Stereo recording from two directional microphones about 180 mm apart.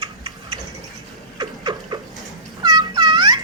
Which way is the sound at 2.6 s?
20° right (ahead or behind).